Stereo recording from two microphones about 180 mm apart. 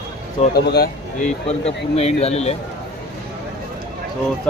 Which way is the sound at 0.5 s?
60° left (ahead or behind).